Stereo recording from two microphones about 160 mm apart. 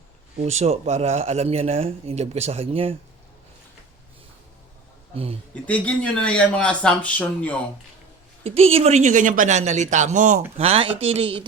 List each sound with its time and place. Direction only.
0.3 s speech: 45° right (ahead or behind)
5.1 s speech: 35° right (ahead or behind)
5.6 s speech: 10° left (ahead or behind)
8.4 s a man's voice: 40° right (ahead or behind)
10.6 s speech: 35° right (ahead or behind)